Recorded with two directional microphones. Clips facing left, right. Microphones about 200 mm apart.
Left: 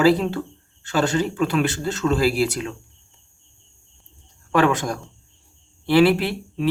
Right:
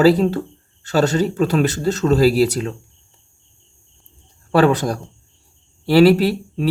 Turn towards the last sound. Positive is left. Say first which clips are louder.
# right 6 dB
turn(degrees=-40)  # may be behind; listen again after turning